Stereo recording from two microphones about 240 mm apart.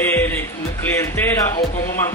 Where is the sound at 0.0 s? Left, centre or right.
Centre.